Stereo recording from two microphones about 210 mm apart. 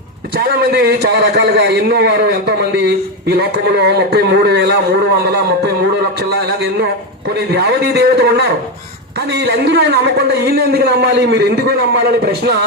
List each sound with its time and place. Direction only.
0.3 s a man's voice: 45° right (ahead or behind)